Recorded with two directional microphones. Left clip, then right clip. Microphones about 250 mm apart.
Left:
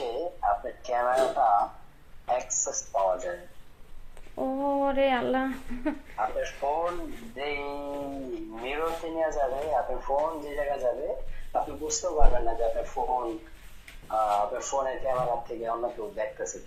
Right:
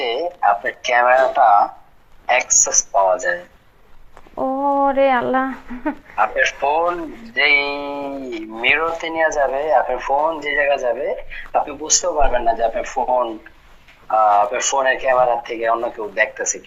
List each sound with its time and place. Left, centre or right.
0.0 s a sound: right
2.2 s speech: right
4.4 s speech: centre
6.1 s speech: right
11.9 s speech: right